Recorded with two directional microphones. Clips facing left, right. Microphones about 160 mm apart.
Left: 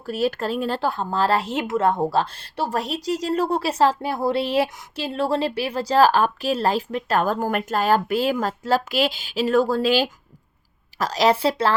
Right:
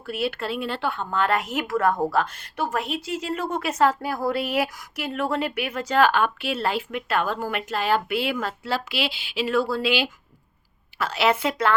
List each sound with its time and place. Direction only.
0.0 s speech: 40° left (ahead or behind)